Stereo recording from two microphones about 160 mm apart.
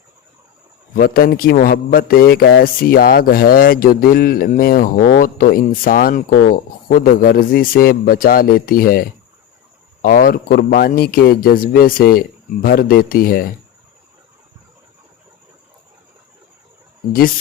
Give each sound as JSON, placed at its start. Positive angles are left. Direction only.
{"t": 0.9, "sound": "a man's voice", "side_deg": 65}